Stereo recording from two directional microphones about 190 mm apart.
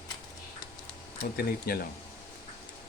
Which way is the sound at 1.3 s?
50° left (ahead or behind).